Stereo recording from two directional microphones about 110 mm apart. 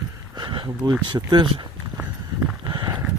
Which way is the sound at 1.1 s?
45° right (ahead or behind).